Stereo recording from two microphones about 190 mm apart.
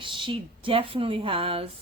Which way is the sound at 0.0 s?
25° right (ahead or behind).